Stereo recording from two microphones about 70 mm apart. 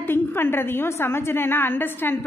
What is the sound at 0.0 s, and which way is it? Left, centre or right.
A woman's voice, left.